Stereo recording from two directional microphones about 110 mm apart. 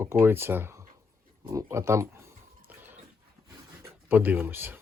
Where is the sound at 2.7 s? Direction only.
15° right (ahead or behind).